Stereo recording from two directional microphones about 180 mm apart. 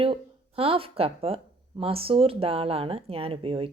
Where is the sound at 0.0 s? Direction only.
30° right (ahead or behind).